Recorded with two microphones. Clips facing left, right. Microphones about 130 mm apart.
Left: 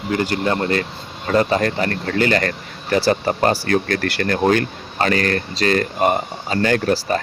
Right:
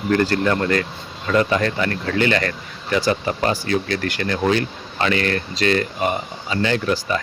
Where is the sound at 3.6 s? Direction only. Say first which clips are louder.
Left 2 dB; 50° left (ahead or behind).